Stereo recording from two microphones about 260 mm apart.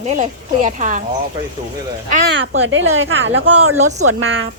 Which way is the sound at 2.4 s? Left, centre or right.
Right.